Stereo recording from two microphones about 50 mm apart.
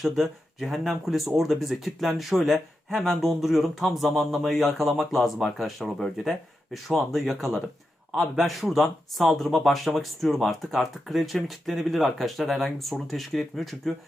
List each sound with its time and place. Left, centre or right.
0.0 s speech: centre